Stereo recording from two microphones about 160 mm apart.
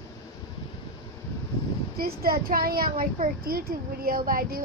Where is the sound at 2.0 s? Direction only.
65° right (ahead or behind).